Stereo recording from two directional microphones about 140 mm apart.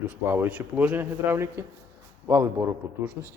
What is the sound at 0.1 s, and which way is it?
A man's voice, 15° right (ahead or behind).